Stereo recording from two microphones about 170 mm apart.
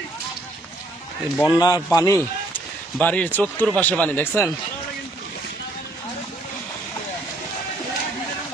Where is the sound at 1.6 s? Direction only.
20° left (ahead or behind).